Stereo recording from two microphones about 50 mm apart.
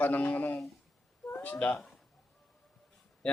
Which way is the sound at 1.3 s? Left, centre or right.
Left.